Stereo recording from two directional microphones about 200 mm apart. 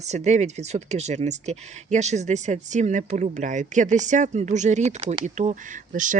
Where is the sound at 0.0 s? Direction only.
35° right (ahead or behind).